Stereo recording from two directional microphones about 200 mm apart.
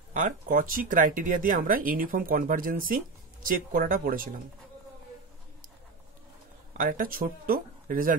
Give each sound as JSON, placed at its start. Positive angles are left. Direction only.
{"t": 0.1, "sound": "speech", "side_deg": -40}
{"t": 6.8, "sound": "speech", "side_deg": -45}